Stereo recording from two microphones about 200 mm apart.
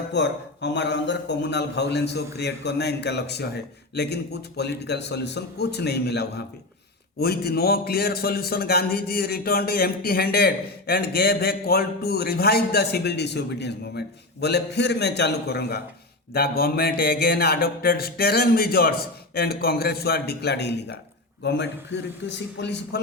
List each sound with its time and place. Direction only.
0.1 s a man's voice: 60° left (ahead or behind)